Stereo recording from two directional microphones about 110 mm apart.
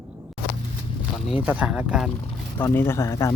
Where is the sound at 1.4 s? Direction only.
15° right (ahead or behind).